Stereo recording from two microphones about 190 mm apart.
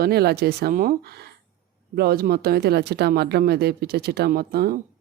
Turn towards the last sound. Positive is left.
turn(degrees=-55)  # may be behind; listen again after turning